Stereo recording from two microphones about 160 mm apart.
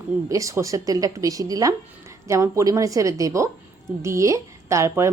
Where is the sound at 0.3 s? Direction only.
20° right (ahead or behind).